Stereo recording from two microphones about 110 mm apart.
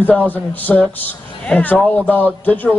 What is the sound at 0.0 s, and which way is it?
Speech, 15° left (ahead or behind).